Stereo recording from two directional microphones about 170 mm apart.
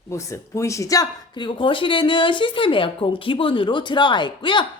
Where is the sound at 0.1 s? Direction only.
15° left (ahead or behind).